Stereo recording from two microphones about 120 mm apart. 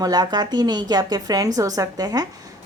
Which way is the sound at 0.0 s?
35° right (ahead or behind).